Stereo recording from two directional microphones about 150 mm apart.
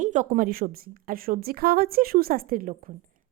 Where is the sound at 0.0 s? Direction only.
60° right (ahead or behind).